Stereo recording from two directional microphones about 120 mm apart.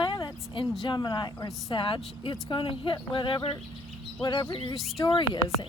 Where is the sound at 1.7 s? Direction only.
45° left (ahead or behind).